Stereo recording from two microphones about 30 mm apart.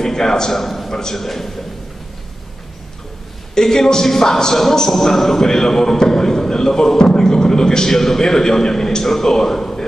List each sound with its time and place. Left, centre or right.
0.0 s a man's voice: centre
3.5 s a man's voice: centre